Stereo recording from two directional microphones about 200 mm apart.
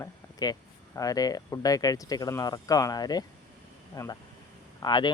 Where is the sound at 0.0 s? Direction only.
20° left (ahead or behind).